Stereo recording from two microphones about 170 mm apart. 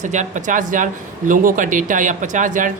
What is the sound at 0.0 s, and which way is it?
Speech, 45° right (ahead or behind).